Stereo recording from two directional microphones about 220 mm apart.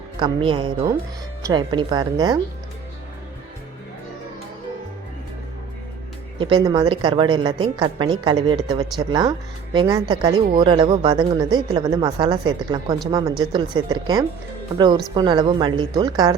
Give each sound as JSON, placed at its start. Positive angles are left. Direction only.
{"t": 0.2, "sound": "speech", "side_deg": -25}
{"t": 6.4, "sound": "speech", "side_deg": -20}